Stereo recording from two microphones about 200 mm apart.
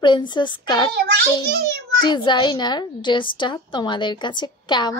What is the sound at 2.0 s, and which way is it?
A child's voice, 20° left (ahead or behind).